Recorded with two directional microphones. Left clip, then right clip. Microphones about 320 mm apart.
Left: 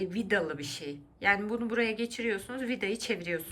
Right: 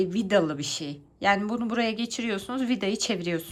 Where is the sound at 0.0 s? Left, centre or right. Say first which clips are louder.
Right 6 dB; centre.